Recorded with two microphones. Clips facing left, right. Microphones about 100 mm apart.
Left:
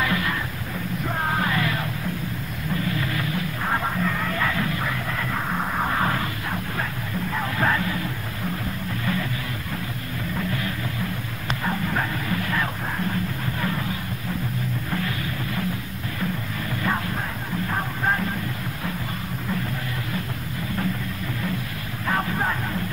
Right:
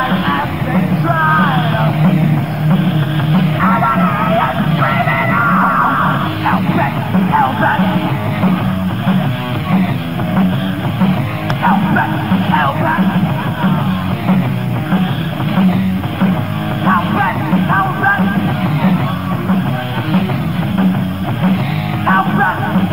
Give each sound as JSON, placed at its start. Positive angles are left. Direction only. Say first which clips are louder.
{"t": 0.7, "sound": "music", "louder": "right 14 dB", "side_deg": -60}
{"t": 3.3, "sound": "music", "louder": "right 17 dB", "side_deg": -80}
{"t": 6.5, "sound": "music", "louder": "right 15 dB", "side_deg": -85}
{"t": 11.6, "sound": "music", "louder": "right 14 dB", "side_deg": -60}
{"t": 15.5, "sound": "music", "louder": "right 15 dB", "side_deg": -65}
{"t": 22.0, "sound": "music", "louder": "right 12 dB", "side_deg": -55}